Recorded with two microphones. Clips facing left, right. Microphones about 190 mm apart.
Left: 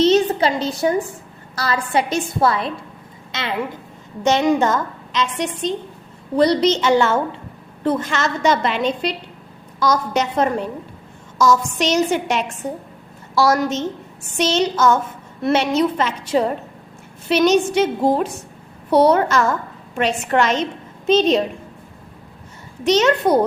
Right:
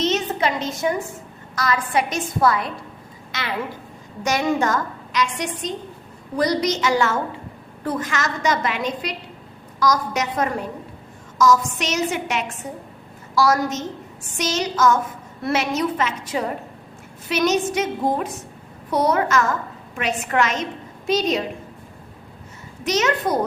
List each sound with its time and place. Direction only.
0.0 s a sound: 30° left (ahead or behind)
1.5 s a woman's voice: 30° left (ahead or behind)
4.2 s a woman's voice: 25° left (ahead or behind)
10.2 s a woman's voice: 30° left (ahead or behind)
18.9 s a woman's voice: 30° left (ahead or behind)
22.8 s a woman's voice: 30° left (ahead or behind)